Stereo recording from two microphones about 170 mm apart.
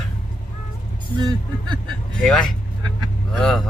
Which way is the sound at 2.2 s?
5° left (ahead or behind).